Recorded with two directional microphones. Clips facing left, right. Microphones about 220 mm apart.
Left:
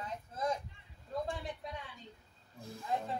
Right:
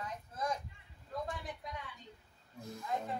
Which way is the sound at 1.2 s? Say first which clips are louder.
Left 2 dB; 30° left (ahead or behind).